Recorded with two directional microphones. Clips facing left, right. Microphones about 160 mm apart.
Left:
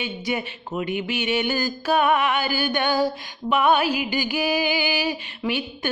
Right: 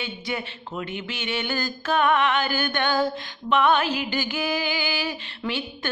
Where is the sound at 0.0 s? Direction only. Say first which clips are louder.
Left 4 dB; 15° left (ahead or behind).